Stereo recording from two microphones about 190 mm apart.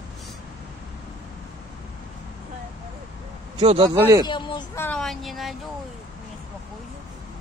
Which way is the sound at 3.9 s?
20° right (ahead or behind).